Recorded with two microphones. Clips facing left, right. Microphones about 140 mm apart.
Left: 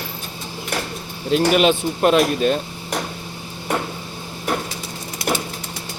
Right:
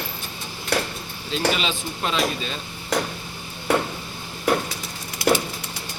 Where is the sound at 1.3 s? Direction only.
55° left (ahead or behind).